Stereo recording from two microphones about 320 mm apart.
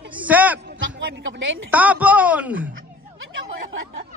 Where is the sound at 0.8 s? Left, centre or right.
Right.